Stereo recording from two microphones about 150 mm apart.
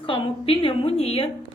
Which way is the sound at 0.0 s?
35° left (ahead or behind).